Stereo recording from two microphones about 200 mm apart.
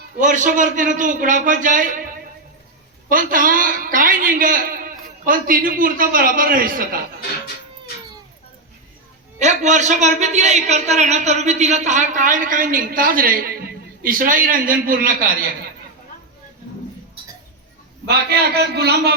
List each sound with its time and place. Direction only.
0.2 s a man's voice: 40° right (ahead or behind)
9.4 s a man's voice: 35° right (ahead or behind)
18.1 s a man's voice: 55° right (ahead or behind)